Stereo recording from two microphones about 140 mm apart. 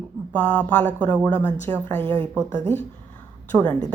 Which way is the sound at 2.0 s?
40° right (ahead or behind).